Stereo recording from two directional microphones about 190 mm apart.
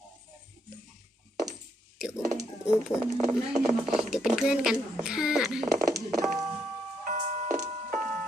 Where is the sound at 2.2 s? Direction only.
15° right (ahead or behind).